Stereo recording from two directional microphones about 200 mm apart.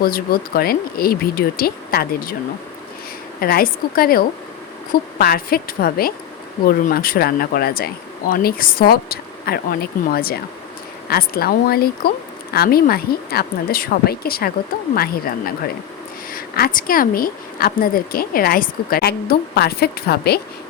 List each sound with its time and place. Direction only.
0.0 s speech: 50° left (ahead or behind)
3.4 s speech: 50° left (ahead or behind)